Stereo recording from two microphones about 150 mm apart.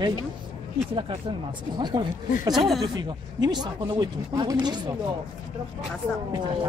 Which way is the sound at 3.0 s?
30° right (ahead or behind).